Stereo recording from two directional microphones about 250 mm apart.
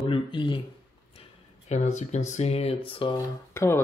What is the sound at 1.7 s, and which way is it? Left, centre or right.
Speech, left.